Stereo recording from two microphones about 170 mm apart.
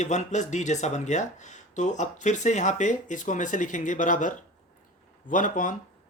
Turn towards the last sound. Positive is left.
turn(degrees=50)  # may be behind; listen again after turning